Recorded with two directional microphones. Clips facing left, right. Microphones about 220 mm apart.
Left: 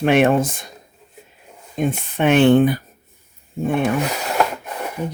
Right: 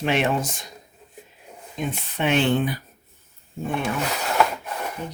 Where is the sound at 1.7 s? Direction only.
50° left (ahead or behind).